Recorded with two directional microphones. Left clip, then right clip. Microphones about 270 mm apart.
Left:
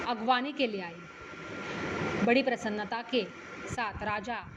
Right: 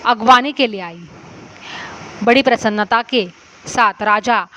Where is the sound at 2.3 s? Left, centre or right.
Right.